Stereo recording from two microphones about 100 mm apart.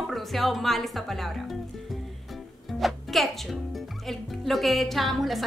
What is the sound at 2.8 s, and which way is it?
Speech, centre (ahead or behind).